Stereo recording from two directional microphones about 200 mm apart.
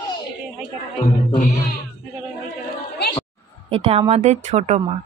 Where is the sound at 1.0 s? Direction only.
40° left (ahead or behind).